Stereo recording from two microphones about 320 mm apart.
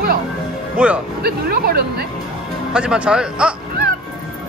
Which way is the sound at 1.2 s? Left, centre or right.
Right.